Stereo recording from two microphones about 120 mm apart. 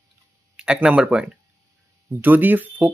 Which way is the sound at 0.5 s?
10° right (ahead or behind).